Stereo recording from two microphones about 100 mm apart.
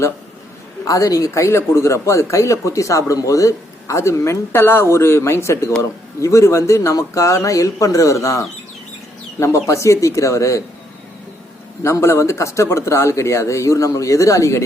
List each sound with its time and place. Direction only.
0.9 s speech: 35° left (ahead or behind)
11.8 s speech: 30° left (ahead or behind)